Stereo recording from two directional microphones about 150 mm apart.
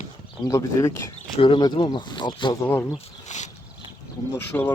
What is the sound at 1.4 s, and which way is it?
Speech, 30° left (ahead or behind).